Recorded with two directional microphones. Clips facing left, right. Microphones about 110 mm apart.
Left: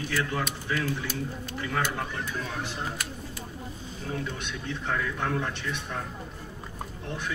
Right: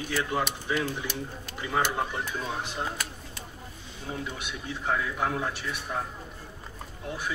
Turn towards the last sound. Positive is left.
turn(degrees=-5)  # may be behind; listen again after turning